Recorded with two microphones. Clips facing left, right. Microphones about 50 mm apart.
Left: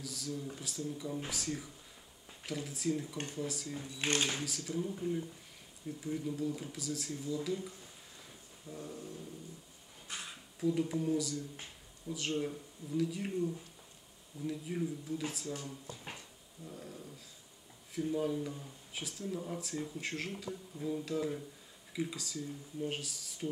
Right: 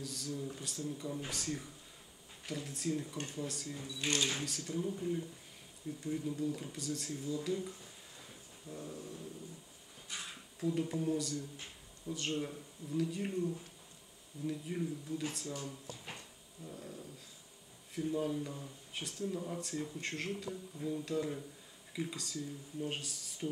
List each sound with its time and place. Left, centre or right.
0.0 s speech: centre
3.8 s speech: left
4.4 s speech: centre
10.6 s speech: centre
14.4 s speech: centre